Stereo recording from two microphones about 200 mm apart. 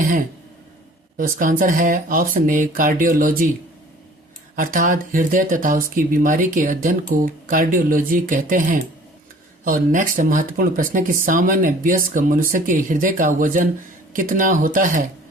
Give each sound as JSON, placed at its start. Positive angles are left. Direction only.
{"t": 1.1, "sound": "speech", "side_deg": -45}
{"t": 4.5, "sound": "speech", "side_deg": -45}